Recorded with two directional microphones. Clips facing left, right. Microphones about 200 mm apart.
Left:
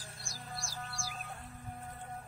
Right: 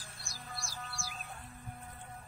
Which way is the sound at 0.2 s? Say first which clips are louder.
Left 1 dB; 45° left (ahead or behind).